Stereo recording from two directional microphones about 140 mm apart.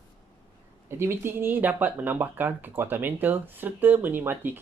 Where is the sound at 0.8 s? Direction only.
20° right (ahead or behind).